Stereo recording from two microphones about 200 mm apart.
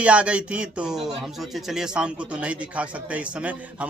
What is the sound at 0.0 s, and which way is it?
Speech, 5° right (ahead or behind).